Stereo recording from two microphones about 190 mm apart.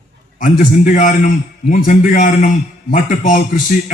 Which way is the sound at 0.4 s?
45° left (ahead or behind).